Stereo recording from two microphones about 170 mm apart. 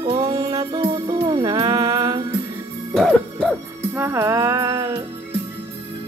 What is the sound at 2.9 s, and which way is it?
Music, 5° left (ahead or behind).